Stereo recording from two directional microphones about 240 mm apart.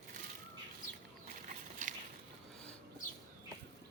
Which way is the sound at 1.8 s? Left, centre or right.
Right.